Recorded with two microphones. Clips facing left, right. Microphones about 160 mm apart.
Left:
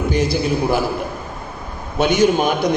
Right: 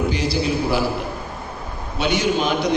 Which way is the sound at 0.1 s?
50° left (ahead or behind).